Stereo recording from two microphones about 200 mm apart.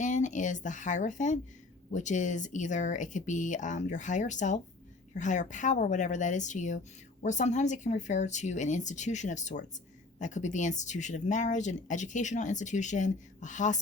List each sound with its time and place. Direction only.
0.0 s speech: 40° left (ahead or behind)